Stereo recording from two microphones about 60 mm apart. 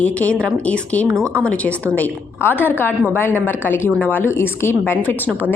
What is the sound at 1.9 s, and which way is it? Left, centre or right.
A woman's voice, left.